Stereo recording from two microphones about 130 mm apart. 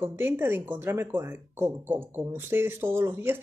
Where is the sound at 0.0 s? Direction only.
15° right (ahead or behind).